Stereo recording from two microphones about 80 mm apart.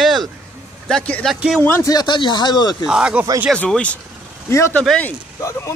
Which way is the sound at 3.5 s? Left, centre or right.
Centre.